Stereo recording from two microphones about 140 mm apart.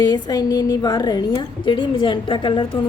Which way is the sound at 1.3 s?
35° left (ahead or behind).